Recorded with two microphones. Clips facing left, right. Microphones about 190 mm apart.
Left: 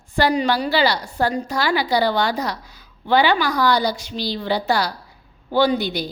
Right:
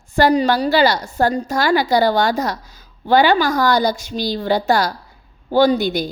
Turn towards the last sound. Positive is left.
turn(degrees=-45)  # may be behind; listen again after turning